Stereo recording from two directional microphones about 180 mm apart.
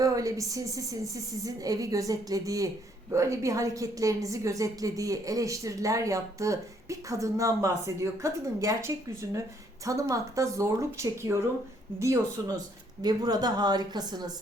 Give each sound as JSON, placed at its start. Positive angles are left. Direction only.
{"t": 0.0, "sound": "a woman's voice", "side_deg": -20}